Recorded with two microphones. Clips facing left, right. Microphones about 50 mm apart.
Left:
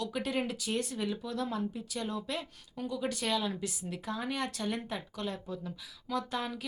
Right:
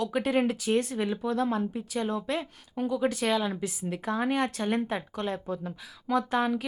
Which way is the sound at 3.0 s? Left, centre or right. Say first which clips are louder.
Right 5 dB; centre.